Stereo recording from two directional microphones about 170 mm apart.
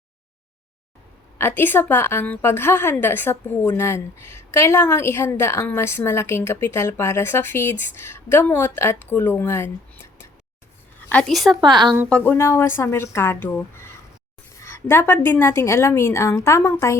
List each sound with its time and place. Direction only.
1.4 s a woman's voice: 15° left (ahead or behind)
11.1 s a woman's voice: 5° left (ahead or behind)
11.6 s a woman's voice: 25° right (ahead or behind)
12.0 s a woman's voice: 10° left (ahead or behind)